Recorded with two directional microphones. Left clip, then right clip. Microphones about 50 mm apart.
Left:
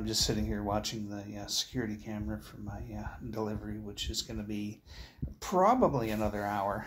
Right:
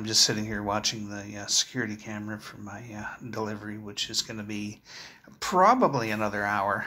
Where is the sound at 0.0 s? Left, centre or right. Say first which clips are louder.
Right 8 dB; left.